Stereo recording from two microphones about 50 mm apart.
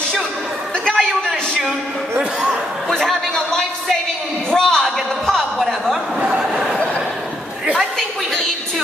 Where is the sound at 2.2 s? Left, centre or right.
Right.